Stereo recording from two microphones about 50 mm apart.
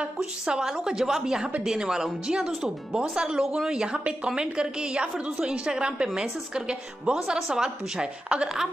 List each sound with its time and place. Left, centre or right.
0.0 s a woman's voice: centre